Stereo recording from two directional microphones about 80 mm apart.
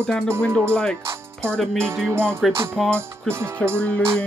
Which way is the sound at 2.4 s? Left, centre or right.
Centre.